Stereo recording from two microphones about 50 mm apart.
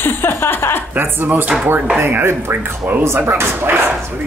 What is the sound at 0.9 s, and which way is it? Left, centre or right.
Speech, right.